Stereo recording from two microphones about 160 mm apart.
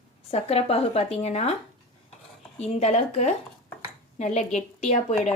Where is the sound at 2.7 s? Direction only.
45° left (ahead or behind).